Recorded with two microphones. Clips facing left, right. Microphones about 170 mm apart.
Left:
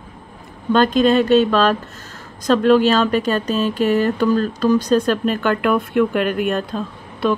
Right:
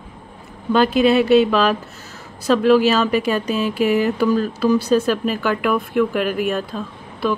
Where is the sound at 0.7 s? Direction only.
10° right (ahead or behind).